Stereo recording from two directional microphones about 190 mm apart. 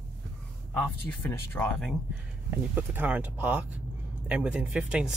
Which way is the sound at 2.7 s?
10° right (ahead or behind).